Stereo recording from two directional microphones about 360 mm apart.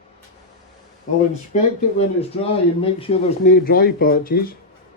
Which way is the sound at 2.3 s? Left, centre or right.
Centre.